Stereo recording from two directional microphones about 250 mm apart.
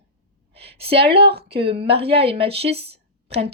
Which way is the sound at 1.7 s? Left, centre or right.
Right.